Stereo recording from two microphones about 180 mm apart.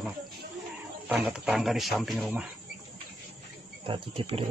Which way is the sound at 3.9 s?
30° right (ahead or behind).